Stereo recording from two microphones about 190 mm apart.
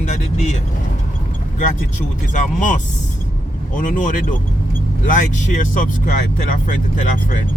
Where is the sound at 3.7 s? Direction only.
45° left (ahead or behind).